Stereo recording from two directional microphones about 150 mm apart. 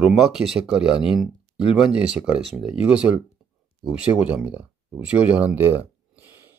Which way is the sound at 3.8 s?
25° left (ahead or behind).